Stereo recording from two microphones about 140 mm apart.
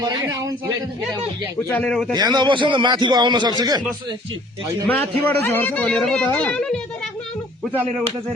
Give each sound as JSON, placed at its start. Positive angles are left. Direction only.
{"t": 0.0, "sound": "a man's voice", "side_deg": -20}
{"t": 1.7, "sound": "a man's voice", "side_deg": 5}
{"t": 2.1, "sound": "a man's voice", "side_deg": -30}
{"t": 4.9, "sound": "speech", "side_deg": 15}